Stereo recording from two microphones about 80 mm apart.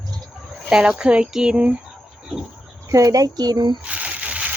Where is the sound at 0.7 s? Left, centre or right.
Centre.